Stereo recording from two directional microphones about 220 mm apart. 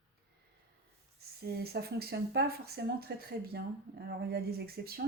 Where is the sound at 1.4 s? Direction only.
45° right (ahead or behind).